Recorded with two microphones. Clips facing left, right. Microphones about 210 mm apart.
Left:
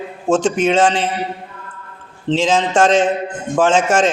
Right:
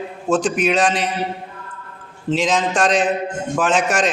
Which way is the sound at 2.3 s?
25° left (ahead or behind).